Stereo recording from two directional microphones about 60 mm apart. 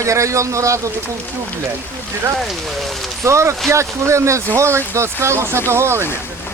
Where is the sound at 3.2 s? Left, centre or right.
Right.